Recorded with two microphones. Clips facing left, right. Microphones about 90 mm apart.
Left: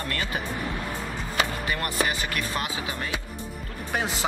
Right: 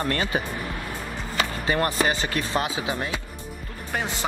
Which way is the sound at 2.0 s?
25° right (ahead or behind).